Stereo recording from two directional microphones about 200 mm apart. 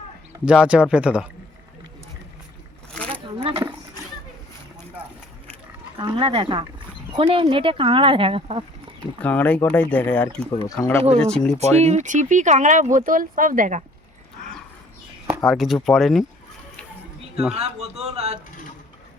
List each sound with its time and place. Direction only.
0.4 s speech: 5° right (ahead or behind)
2.9 s a sound: 5° left (ahead or behind)
3.2 s a sound: 25° right (ahead or behind)
6.0 s speech: 25° right (ahead or behind)
9.2 s speech: 10° left (ahead or behind)
11.6 s speech: 35° right (ahead or behind)
15.4 s speech: centre (ahead or behind)
17.5 s speech: 30° right (ahead or behind)
18.0 s a sound: 30° right (ahead or behind)